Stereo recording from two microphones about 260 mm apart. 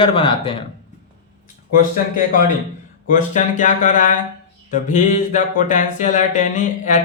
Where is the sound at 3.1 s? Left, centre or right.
Left.